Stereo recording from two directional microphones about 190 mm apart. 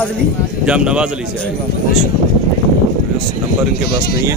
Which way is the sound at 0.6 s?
5° right (ahead or behind).